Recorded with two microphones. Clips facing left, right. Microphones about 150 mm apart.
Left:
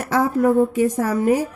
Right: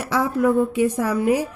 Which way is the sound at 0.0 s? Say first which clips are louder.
Left 2 dB; 45° left (ahead or behind).